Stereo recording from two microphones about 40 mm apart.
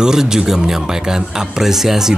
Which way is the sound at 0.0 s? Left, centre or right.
Centre.